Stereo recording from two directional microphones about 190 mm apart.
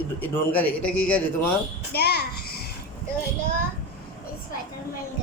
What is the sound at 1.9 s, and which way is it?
Speech, 55° left (ahead or behind).